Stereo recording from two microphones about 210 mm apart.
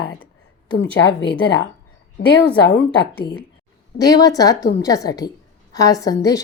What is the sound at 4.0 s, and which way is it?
A woman's voice, 15° left (ahead or behind).